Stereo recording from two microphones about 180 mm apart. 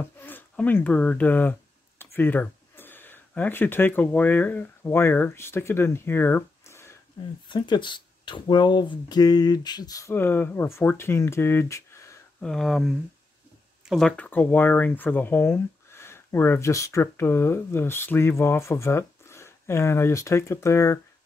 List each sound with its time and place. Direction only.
0.0 s speech: 10° left (ahead or behind)
7.4 s speech: 25° left (ahead or behind)
12.4 s speech: centre (ahead or behind)